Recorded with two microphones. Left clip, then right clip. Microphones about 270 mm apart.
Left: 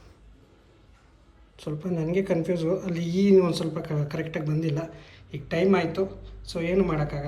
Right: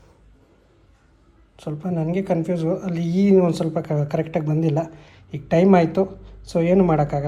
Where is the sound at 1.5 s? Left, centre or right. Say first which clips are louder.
Right 4 dB; centre.